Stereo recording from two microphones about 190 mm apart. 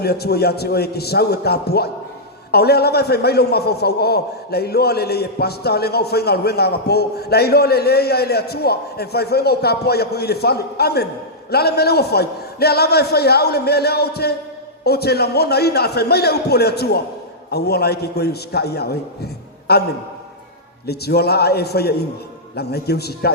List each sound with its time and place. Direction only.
0.0 s a man's voice: 55° left (ahead or behind)
20.8 s a man's voice: 55° left (ahead or behind)